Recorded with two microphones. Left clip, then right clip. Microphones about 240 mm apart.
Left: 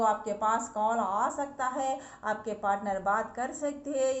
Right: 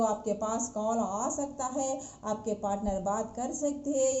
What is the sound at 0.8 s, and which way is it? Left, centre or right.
A woman's voice, centre.